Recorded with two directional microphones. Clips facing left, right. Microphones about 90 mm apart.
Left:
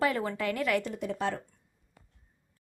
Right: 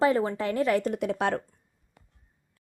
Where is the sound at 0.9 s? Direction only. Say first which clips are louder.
Right 5 dB; 60° right (ahead or behind).